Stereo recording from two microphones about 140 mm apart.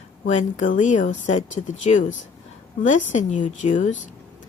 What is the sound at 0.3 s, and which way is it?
Speech, 55° left (ahead or behind).